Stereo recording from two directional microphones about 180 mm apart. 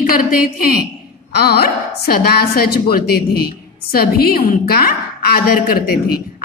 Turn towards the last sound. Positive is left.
turn(degrees=55)  # may be behind; listen again after turning